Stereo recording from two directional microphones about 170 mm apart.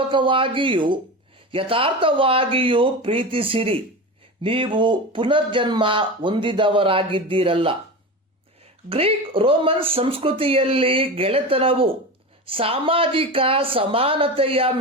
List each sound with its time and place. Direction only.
0.1 s speech: 30° right (ahead or behind)
8.9 s speech: 35° right (ahead or behind)